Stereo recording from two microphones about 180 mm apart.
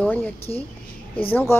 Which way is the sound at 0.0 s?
10° left (ahead or behind).